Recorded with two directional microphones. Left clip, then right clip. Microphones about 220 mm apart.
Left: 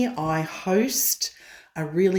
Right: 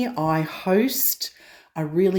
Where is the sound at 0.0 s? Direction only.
30° right (ahead or behind).